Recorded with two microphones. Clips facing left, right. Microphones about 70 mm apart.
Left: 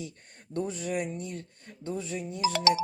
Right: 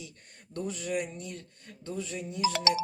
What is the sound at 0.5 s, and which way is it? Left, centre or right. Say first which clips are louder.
Speech: left 2 dB; left.